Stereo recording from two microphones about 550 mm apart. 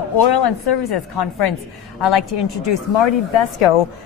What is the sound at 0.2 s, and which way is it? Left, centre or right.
A woman's voice, left.